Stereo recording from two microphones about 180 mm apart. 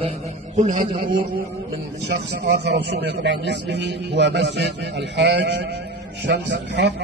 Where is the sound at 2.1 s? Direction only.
70° right (ahead or behind).